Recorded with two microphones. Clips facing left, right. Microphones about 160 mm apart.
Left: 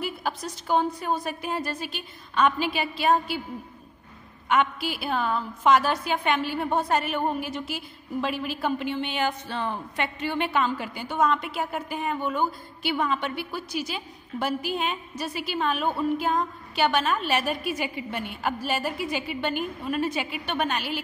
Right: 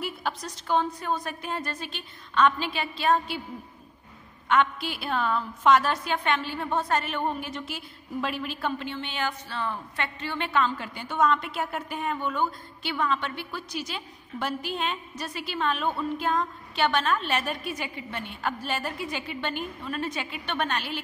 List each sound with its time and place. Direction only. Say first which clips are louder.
0.0 s a woman's voice: left 2 dB; 5° left (ahead or behind)
4.5 s a woman's voice: even; 5° left (ahead or behind)